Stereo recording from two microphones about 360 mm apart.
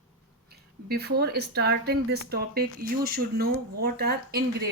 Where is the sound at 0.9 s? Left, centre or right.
Right.